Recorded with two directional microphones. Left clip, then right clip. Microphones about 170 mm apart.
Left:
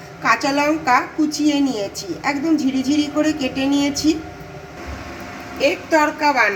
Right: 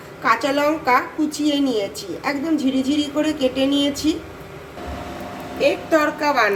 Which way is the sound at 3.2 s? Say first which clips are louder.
Right 1 dB; 45° left (ahead or behind).